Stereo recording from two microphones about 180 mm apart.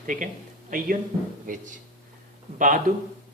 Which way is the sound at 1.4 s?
45° right (ahead or behind).